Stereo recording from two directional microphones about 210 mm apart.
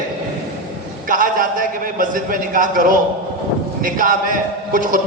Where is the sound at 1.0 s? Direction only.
40° right (ahead or behind).